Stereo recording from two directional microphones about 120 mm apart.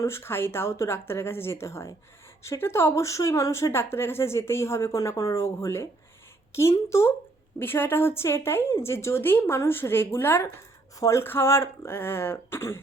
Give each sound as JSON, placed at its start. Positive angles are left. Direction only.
{"t": 0.0, "sound": "a woman's voice", "side_deg": 20}